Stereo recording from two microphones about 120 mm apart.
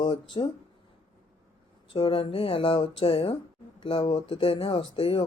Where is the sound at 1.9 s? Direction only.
50° left (ahead or behind).